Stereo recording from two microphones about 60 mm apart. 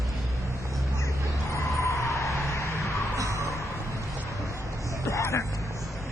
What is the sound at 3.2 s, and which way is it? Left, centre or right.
Music, right.